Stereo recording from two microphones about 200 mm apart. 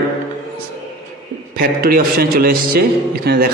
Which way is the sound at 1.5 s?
45° right (ahead or behind).